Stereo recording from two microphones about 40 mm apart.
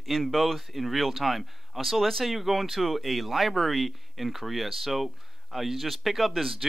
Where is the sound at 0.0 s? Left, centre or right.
Centre.